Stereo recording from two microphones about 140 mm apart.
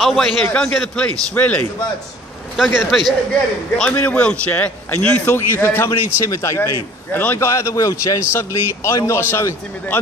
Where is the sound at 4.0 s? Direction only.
10° left (ahead or behind).